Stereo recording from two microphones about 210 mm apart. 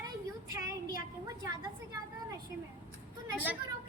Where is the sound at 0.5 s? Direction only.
15° right (ahead or behind).